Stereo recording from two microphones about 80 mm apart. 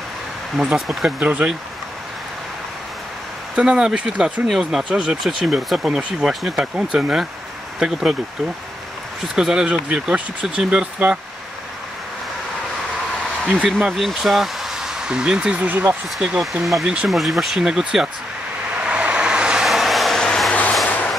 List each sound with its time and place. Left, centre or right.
0.6 s speech: centre
1.2 s speech: centre
3.5 s speech: centre
9.3 s speech: centre
13.7 s speech: centre; by 16.0 s right
16.2 s speech: centre
17.1 s speech: centre
18.8 s vehicle: centre
20.8 s a sound: centre